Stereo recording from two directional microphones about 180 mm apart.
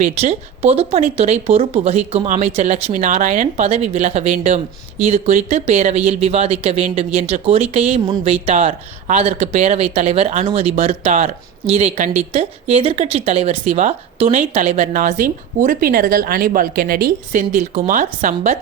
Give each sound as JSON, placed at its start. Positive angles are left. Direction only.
{"t": 0.0, "sound": "speech", "side_deg": -40}
{"t": 17.5, "sound": "speech", "side_deg": -40}